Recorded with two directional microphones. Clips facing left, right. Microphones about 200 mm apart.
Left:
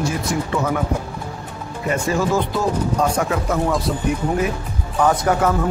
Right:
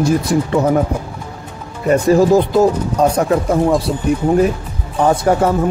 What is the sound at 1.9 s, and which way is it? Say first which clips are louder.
A man's voice: right 9 dB; 35° right (ahead or behind).